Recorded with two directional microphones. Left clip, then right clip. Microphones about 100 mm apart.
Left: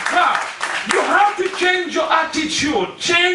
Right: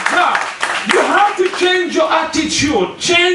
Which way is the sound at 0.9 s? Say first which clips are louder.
Right 5 dB; 25° right (ahead or behind).